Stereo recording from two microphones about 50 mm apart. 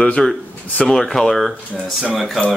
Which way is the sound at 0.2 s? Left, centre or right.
Centre.